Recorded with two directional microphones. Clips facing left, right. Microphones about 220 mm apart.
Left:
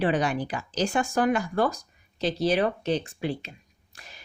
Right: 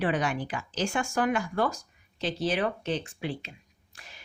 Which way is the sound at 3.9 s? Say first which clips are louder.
Left 2 dB; 40° left (ahead or behind).